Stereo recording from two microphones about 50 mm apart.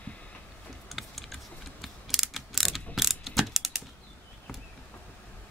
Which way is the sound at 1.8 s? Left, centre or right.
Centre.